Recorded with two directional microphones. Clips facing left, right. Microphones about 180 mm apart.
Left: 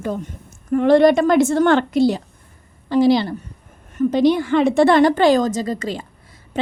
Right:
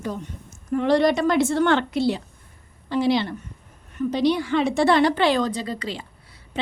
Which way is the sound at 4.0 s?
50° left (ahead or behind).